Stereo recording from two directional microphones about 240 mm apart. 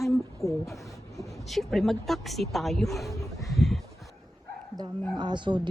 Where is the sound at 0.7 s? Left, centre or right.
Centre.